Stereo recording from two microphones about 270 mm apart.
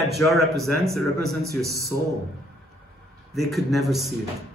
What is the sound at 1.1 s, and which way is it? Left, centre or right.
Speech, right.